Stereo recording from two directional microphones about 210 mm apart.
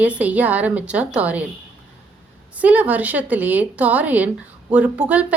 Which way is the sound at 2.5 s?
5° right (ahead or behind).